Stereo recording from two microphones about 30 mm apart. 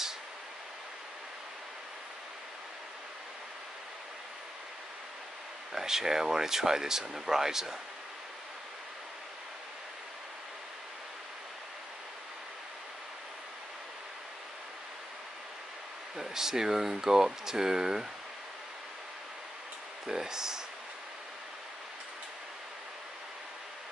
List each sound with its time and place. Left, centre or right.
5.7 s speech: centre
16.2 s speech: centre
20.1 s speech: centre